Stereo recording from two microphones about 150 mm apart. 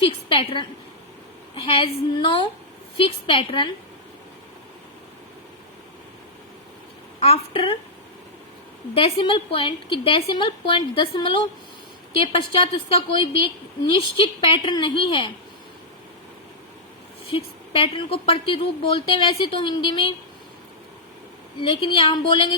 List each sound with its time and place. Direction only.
0.0 s a woman's voice: 35° left (ahead or behind)
1.6 s a woman's voice: 35° left (ahead or behind)
7.2 s a woman's voice: 40° left (ahead or behind)
9.0 s a woman's voice: 35° left (ahead or behind)
12.5 s a woman's voice: 35° left (ahead or behind)
17.2 s a woman's voice: 35° left (ahead or behind)
21.7 s a woman's voice: 40° left (ahead or behind)